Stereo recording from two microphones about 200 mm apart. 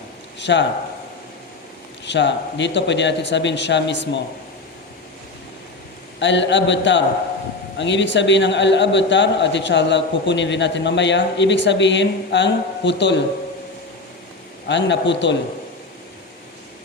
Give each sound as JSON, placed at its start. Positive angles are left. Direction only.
{"t": 0.3, "sound": "speech", "side_deg": 60}
{"t": 2.0, "sound": "a man's voice", "side_deg": 65}
{"t": 6.1, "sound": "a man's voice", "side_deg": 65}
{"t": 14.7, "sound": "a man's voice", "side_deg": 65}